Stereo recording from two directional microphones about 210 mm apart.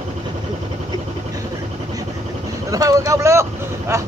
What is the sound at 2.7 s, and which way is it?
Vehicle, 15° right (ahead or behind).